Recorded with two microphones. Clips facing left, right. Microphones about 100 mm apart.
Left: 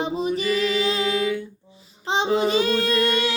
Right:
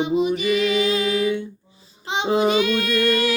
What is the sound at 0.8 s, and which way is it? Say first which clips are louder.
Music: right 2 dB; 30° left (ahead or behind).